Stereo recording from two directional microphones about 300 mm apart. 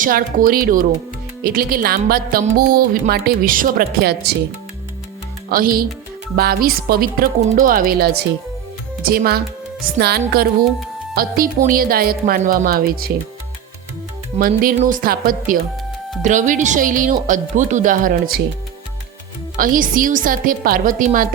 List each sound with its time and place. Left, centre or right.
0.0 s speech: right
5.5 s speech: right
14.3 s speech: right
19.5 s speech: right